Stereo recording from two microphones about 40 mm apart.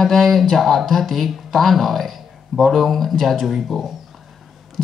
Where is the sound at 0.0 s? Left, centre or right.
Centre.